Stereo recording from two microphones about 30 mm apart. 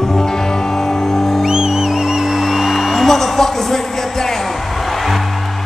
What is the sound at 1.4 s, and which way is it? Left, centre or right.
Music, right.